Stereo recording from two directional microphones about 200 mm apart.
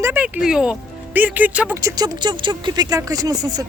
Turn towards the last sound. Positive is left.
turn(degrees=-20)  # may be behind; listen again after turning